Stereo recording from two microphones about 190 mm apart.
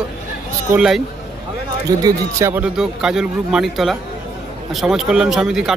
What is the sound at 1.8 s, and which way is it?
A man's voice, 15° right (ahead or behind).